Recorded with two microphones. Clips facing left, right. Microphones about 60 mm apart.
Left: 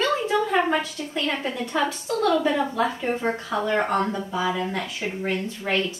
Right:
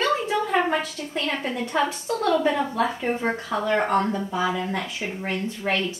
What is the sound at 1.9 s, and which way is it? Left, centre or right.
Speech, right.